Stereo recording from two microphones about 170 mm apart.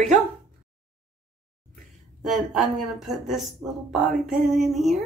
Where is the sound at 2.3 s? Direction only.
Centre (ahead or behind).